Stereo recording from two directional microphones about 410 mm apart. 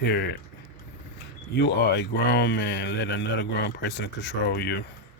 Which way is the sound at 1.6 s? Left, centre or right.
Left.